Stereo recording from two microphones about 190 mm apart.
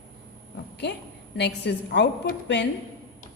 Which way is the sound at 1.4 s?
65° left (ahead or behind).